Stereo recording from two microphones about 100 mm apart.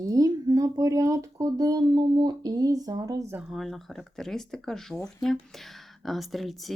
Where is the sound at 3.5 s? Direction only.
Centre (ahead or behind).